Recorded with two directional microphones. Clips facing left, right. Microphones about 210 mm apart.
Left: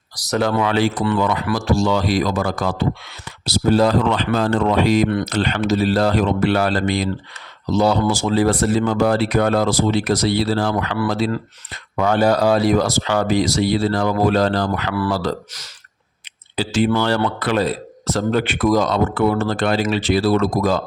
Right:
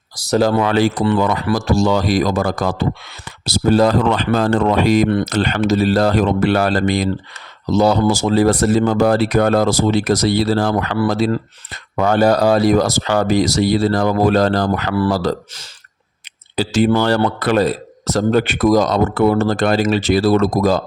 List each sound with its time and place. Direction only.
0.2 s speech: 30° right (ahead or behind)
16.6 s speech: 40° right (ahead or behind)